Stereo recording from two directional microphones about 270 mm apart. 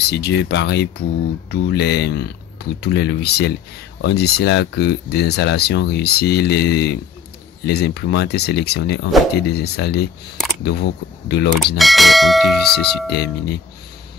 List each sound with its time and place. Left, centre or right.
0.1 s speech: left
11.7 s speech: centre
13.1 s speech: left